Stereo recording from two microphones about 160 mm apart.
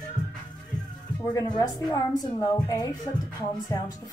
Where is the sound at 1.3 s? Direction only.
25° left (ahead or behind).